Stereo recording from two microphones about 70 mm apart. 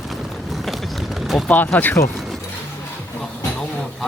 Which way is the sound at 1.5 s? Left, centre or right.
Left.